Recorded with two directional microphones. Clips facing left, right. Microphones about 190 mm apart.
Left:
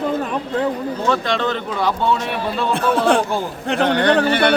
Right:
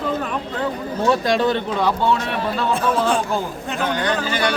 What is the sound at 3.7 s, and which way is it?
Speech, 65° left (ahead or behind).